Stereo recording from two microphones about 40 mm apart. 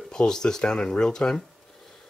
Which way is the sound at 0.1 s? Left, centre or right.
Centre.